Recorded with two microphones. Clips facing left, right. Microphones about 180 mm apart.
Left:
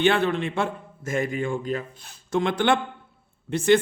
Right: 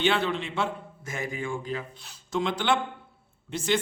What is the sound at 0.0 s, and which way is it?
A man's voice, 55° left (ahead or behind).